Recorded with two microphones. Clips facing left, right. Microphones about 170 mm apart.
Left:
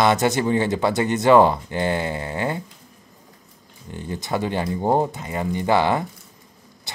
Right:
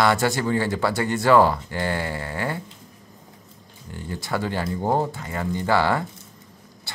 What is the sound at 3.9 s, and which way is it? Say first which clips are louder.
A man's voice: left 2 dB; 20° left (ahead or behind).